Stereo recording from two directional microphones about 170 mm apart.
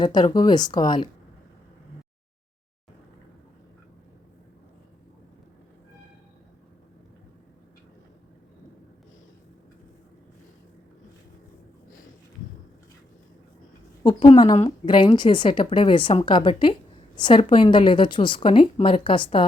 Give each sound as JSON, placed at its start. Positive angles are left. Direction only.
{"t": 0.0, "sound": "a woman's voice", "side_deg": 25}
{"t": 14.0, "sound": "a woman's voice", "side_deg": 25}